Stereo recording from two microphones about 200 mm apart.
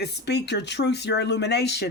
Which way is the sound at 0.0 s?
55° left (ahead or behind).